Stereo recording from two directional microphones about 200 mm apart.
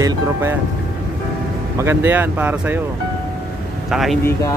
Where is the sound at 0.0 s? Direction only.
15° right (ahead or behind).